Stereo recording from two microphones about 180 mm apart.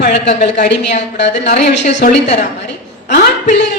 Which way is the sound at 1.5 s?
40° left (ahead or behind).